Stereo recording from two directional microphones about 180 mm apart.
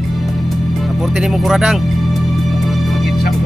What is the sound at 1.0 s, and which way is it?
Speech, centre (ahead or behind).